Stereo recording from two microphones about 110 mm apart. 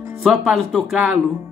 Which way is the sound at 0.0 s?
5° right (ahead or behind).